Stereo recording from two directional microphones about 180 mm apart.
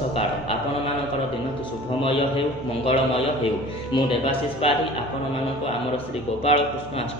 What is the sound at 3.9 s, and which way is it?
Speech, 30° left (ahead or behind).